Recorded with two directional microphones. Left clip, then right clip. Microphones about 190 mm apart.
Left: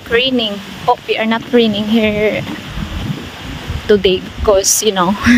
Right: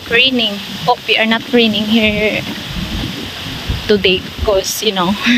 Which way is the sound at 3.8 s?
20° left (ahead or behind).